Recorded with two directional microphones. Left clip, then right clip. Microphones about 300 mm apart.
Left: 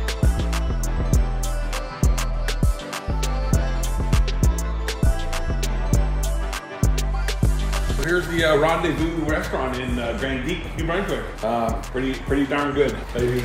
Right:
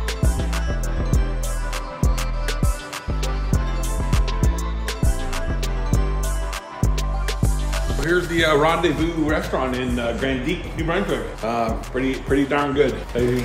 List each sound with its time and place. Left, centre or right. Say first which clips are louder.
4.1 s music: right 1 dB; centre
6.8 s speech: even; centre